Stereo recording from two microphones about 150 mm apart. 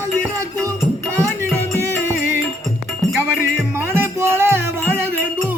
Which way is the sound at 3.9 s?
15° right (ahead or behind).